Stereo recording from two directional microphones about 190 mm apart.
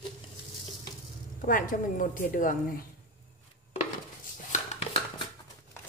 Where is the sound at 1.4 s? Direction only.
45° left (ahead or behind).